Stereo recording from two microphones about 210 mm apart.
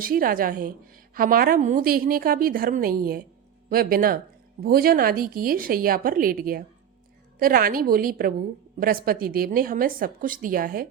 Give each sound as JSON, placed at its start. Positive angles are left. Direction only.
{"t": 0.0, "sound": "a woman's voice", "side_deg": -45}